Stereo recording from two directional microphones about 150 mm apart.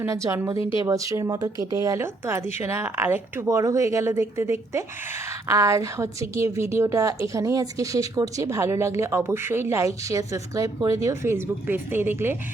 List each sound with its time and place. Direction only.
0.0 s a woman's voice: 20° right (ahead or behind)